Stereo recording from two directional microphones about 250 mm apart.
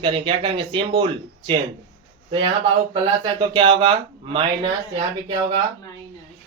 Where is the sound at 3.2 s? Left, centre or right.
Centre.